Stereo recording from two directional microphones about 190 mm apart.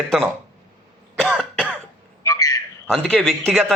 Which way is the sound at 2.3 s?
20° left (ahead or behind).